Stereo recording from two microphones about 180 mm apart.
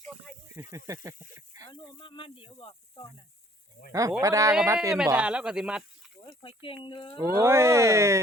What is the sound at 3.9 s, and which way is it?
Speech, 20° right (ahead or behind).